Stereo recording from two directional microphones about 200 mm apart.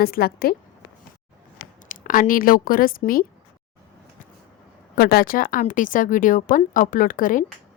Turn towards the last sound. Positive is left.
turn(degrees=45)  # may be behind; listen again after turning